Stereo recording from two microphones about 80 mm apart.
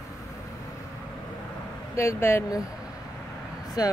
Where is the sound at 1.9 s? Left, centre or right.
Left.